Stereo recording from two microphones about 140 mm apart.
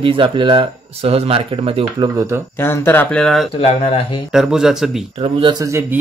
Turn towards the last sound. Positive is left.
turn(degrees=-35)  # may be behind; listen again after turning